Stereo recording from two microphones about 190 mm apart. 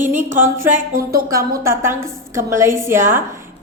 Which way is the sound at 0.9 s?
50° right (ahead or behind).